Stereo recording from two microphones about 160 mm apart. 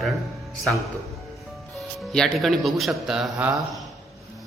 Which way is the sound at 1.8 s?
Centre (ahead or behind).